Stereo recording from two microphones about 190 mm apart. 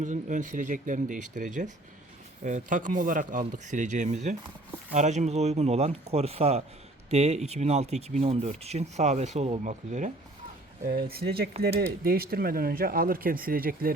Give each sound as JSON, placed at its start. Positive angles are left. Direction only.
{"t": 0.0, "sound": "speech", "side_deg": -40}
{"t": 10.8, "sound": "speech", "side_deg": -55}